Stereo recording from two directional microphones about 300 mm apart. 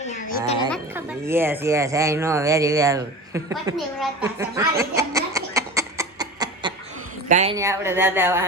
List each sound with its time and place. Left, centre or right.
0.0 s a sound: left
0.7 s speech: centre; by 7.5 s right
7.5 s speech: centre